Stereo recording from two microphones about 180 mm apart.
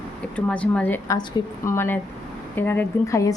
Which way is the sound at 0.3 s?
5° left (ahead or behind).